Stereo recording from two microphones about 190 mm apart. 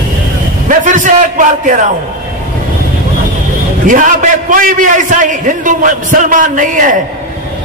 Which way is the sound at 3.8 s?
45° right (ahead or behind).